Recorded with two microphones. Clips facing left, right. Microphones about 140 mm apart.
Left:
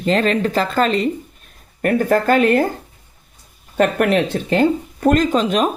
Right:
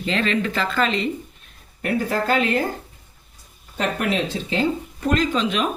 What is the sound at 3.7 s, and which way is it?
Speech, 55° left (ahead or behind).